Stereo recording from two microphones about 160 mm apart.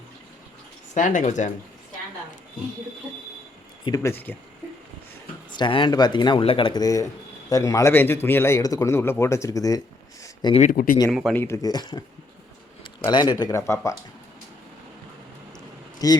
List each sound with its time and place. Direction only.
0.9 s speech: 50° left (ahead or behind)
3.8 s speech: 20° left (ahead or behind)
5.5 s speech: 30° left (ahead or behind)
10.6 s speech: 65° left (ahead or behind)
11.1 s speech: centre (ahead or behind)
11.3 s speech: 20° left (ahead or behind)
16.0 s speech: 25° left (ahead or behind)